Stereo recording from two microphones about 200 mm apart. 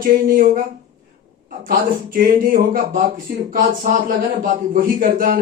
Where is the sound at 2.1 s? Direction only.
45° right (ahead or behind).